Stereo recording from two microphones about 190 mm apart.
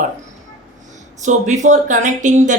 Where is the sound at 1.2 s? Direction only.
40° right (ahead or behind).